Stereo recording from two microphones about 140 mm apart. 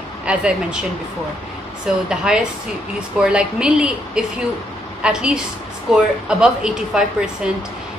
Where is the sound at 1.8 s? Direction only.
5° right (ahead or behind).